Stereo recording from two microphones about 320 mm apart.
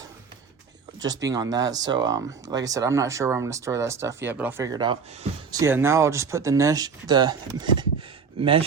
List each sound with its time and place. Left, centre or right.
1.0 s speech: centre